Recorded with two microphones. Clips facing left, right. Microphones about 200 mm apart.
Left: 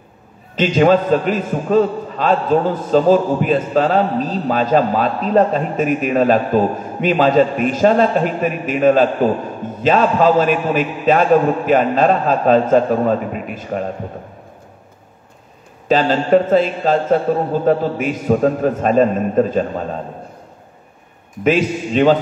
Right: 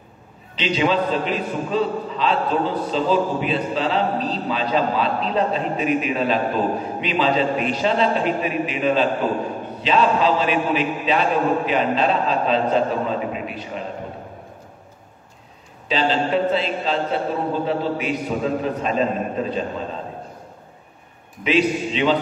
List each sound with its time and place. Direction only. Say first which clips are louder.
0.6 s a man's voice: left 7 dB; 45° left (ahead or behind)
15.9 s a man's voice: left 7 dB; 50° left (ahead or behind)
21.5 s a man's voice: left 3 dB; 45° left (ahead or behind)